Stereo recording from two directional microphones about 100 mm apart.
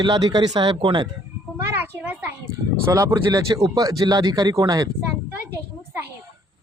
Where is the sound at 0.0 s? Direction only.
45° right (ahead or behind).